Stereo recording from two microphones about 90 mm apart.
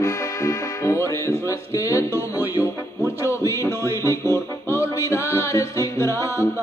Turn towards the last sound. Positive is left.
turn(degrees=35)  # may be behind; listen again after turning